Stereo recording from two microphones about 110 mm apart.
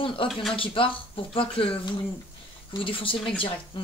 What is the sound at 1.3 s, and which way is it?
Speech, 55° left (ahead or behind).